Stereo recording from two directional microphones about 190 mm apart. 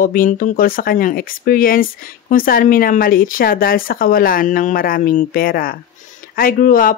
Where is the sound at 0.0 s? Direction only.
50° left (ahead or behind).